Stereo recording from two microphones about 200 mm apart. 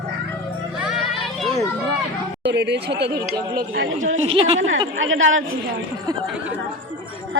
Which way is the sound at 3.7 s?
80° right.